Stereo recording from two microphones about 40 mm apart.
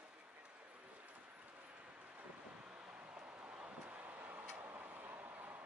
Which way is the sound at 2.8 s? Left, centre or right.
Right.